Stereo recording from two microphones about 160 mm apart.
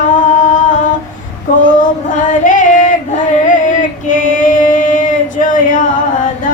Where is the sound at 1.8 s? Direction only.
55° left (ahead or behind).